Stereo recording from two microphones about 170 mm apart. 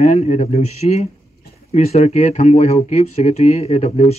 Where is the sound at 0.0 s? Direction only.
40° left (ahead or behind).